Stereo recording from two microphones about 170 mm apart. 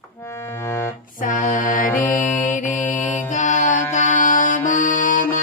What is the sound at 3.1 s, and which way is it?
Music, 45° left (ahead or behind).